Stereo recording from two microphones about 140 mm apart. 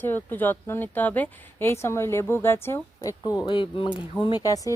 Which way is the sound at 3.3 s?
30° left (ahead or behind).